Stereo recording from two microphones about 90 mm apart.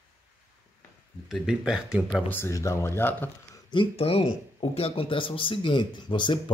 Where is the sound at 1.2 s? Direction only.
5° right (ahead or behind).